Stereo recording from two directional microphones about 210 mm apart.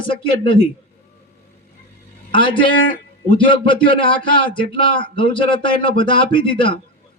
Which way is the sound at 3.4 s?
25° left (ahead or behind).